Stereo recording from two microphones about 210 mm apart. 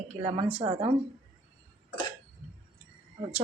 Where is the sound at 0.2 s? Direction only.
35° right (ahead or behind).